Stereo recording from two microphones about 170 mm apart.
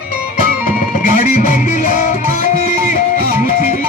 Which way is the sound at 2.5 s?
60° right (ahead or behind).